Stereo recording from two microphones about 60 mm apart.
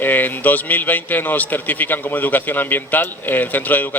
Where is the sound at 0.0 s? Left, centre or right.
Left.